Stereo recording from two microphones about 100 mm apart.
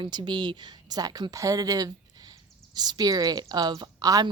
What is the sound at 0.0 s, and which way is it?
A woman's voice, 50° right (ahead or behind).